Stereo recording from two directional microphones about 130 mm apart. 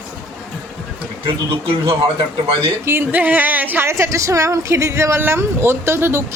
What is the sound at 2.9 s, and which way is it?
A woman's voice, 15° right (ahead or behind).